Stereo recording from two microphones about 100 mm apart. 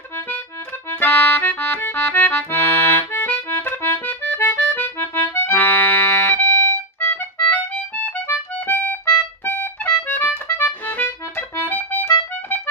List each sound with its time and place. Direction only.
0.9 s accordion: 20° left (ahead or behind)